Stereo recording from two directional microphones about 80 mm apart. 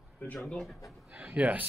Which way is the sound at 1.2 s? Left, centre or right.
Centre.